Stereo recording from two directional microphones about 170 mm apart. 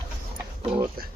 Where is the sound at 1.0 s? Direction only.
60° right (ahead or behind).